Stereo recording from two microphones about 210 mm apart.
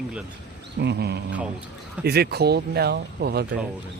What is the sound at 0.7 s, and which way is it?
Speech, 50° right (ahead or behind).